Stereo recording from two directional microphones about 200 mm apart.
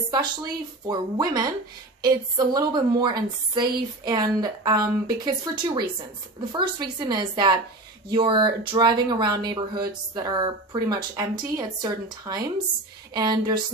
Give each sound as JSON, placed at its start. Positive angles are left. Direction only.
{"t": 0.1, "sound": "speech", "side_deg": -20}